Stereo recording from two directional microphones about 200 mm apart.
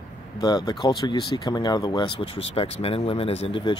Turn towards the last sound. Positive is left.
turn(degrees=25)  # may be behind; listen again after turning